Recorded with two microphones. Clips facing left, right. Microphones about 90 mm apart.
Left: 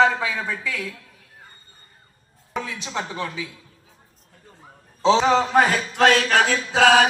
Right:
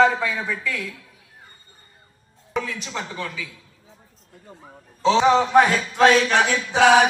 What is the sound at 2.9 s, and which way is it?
Speech, 30° left (ahead or behind).